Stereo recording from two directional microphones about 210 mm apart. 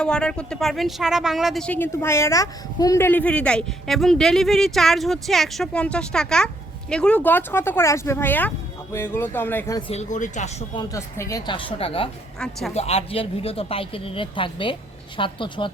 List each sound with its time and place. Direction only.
0.0 s speech: 5° left (ahead or behind)
9.9 s speech: 35° left (ahead or behind)
10.8 s speech: 15° left (ahead or behind)
12.4 s speech: centre (ahead or behind)
12.7 s speech: 30° left (ahead or behind)